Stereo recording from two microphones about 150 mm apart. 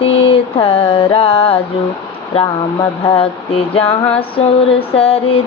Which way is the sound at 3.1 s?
35° left (ahead or behind).